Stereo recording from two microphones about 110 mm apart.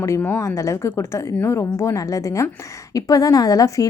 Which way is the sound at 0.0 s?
20° left (ahead or behind).